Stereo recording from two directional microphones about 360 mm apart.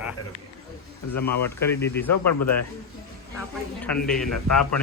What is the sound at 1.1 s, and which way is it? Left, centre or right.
Speech, left.